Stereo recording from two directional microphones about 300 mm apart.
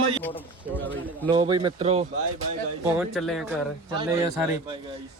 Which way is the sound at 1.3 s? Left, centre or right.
Centre.